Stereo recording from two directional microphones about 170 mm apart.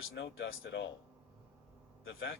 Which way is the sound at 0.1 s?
90° left.